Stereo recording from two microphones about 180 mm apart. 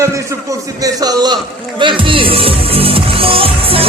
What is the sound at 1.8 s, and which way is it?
Music, 30° right (ahead or behind).